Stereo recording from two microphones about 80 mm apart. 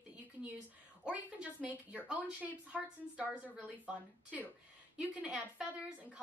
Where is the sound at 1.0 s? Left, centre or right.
Centre.